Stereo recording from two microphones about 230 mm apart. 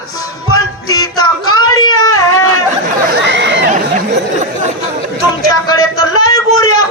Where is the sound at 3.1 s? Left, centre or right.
Right.